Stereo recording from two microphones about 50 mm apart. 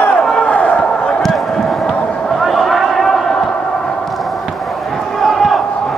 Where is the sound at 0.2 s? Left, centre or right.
Centre.